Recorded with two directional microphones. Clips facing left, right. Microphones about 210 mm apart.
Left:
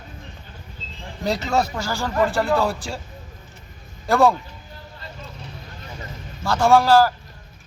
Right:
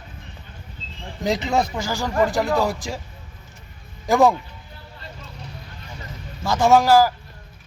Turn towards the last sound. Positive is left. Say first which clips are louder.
# even
turn(degrees=-15)  # may be behind; listen again after turning